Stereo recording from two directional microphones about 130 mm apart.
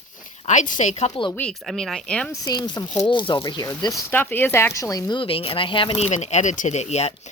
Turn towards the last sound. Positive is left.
turn(degrees=55)  # may be behind; listen again after turning